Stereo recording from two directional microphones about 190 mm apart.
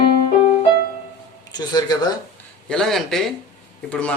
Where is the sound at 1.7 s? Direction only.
20° left (ahead or behind).